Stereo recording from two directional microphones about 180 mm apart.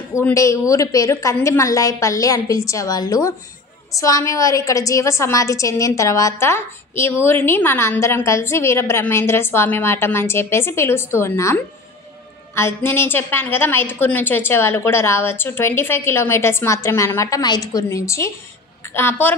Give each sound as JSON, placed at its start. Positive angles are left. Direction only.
{"t": 0.1, "sound": "a woman's voice", "side_deg": 15}